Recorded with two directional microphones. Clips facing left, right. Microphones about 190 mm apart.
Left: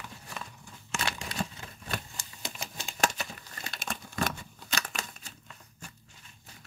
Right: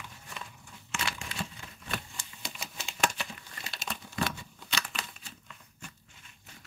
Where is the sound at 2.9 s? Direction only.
40° left (ahead or behind).